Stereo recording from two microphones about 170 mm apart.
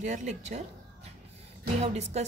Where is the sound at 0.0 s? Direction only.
45° right (ahead or behind).